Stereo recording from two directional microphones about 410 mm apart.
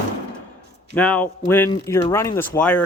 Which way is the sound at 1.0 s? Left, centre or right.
Centre.